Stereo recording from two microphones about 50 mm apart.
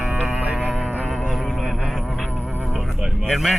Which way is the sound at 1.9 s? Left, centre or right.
Centre.